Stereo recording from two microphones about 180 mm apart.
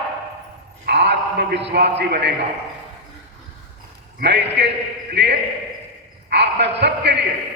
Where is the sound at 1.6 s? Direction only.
70° right (ahead or behind).